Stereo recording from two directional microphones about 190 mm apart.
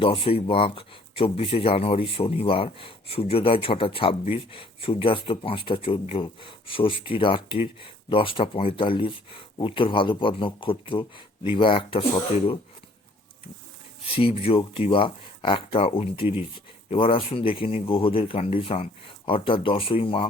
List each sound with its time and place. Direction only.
0.0 s speech: 30° left (ahead or behind)
14.2 s speech: 30° left (ahead or behind)